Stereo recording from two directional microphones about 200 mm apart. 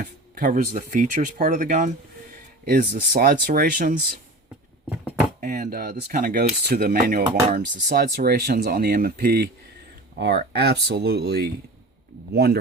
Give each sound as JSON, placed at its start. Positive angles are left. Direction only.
{"t": 0.0, "sound": "speech", "side_deg": -45}
{"t": 5.4, "sound": "speech", "side_deg": -40}